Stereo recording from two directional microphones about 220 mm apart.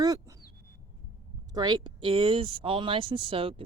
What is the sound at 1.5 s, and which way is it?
Speech, 20° right (ahead or behind).